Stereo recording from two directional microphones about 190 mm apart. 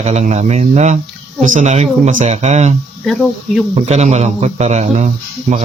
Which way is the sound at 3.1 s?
Centre (ahead or behind).